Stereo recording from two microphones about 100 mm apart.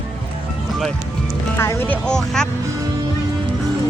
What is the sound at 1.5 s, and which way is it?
Music, 25° left (ahead or behind).